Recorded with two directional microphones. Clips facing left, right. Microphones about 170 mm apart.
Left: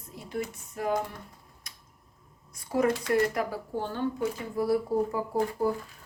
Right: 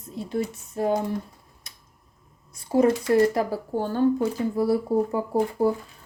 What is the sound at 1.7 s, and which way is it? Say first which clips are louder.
Tick-tock: right 1 dB; 25° right (ahead or behind).